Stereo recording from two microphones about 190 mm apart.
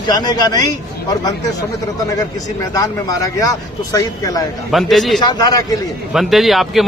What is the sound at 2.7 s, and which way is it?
A man's voice, 20° left (ahead or behind).